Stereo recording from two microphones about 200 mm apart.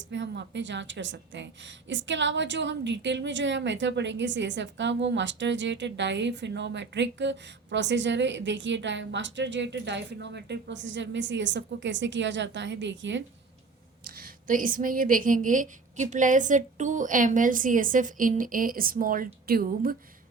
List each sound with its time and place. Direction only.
0.1 s a woman's voice: 65° right (ahead or behind)
14.0 s a woman's voice: 45° right (ahead or behind)